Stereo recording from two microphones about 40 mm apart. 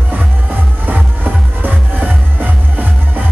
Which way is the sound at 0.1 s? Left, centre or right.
Right.